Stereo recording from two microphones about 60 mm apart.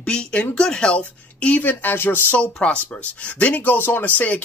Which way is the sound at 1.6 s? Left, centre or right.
Left.